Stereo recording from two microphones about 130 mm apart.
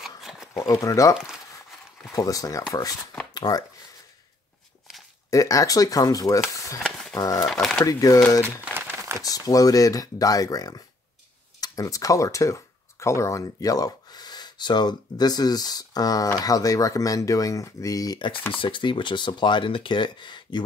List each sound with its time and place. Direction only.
0.2 s a sound: 5° right (ahead or behind)
0.6 s speech: 25° left (ahead or behind)
2.1 s speech: 25° left (ahead or behind)
5.3 s speech: 25° left (ahead or behind)
6.8 s a sound: 5° left (ahead or behind)
7.2 s speech: 30° left (ahead or behind)
7.4 s speech: 5° left (ahead or behind)
7.8 s speech: 25° left (ahead or behind)
8.5 s crumpling: 15° right (ahead or behind)
9.2 s speech: 25° left (ahead or behind)